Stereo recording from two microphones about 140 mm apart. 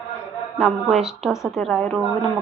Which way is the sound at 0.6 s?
Centre (ahead or behind).